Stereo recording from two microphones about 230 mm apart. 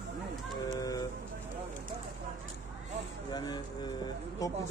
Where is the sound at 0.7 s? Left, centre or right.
Centre.